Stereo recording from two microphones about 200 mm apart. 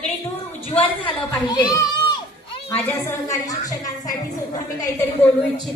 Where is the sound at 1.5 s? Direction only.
20° left (ahead or behind).